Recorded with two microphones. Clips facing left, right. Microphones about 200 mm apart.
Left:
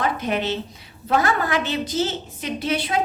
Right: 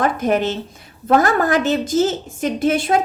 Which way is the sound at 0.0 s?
45° right (ahead or behind).